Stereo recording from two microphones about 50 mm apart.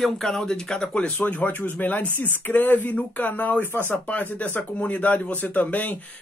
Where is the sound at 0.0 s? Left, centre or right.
Centre; by 5.9 s left.